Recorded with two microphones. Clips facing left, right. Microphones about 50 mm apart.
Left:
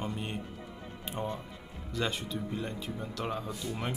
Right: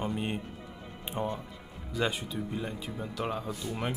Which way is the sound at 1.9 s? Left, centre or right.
Centre.